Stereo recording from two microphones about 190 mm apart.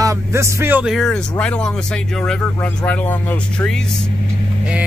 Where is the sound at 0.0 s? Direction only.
15° right (ahead or behind).